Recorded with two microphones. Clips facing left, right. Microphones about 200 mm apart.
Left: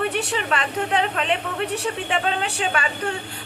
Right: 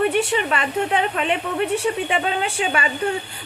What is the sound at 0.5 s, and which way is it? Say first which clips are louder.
A woman's voice: left 2 dB; 5° right (ahead or behind).